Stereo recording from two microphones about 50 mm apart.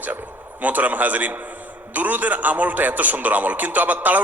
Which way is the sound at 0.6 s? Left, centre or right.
Right.